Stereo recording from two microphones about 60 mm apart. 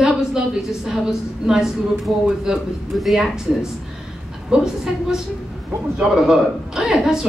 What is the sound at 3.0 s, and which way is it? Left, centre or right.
Speech, centre.